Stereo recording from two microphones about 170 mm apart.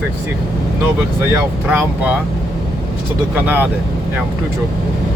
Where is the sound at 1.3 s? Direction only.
15° right (ahead or behind).